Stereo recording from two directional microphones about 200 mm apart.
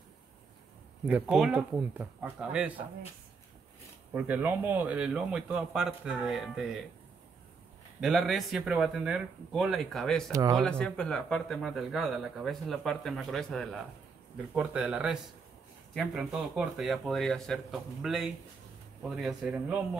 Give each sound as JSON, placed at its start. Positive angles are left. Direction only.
{"t": 1.0, "sound": "speech", "side_deg": -5}
{"t": 4.1, "sound": "speech", "side_deg": -10}
{"t": 8.0, "sound": "speech", "side_deg": 0}
{"t": 10.3, "sound": "speech", "side_deg": -15}
{"t": 10.6, "sound": "speech", "side_deg": 5}